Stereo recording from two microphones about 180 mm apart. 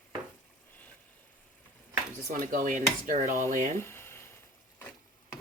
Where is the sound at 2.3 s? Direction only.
50° right (ahead or behind).